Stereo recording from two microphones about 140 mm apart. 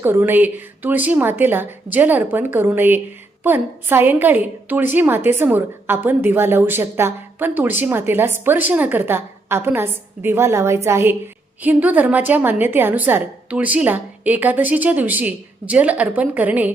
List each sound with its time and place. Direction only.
0.0 s a woman's voice: 15° right (ahead or behind)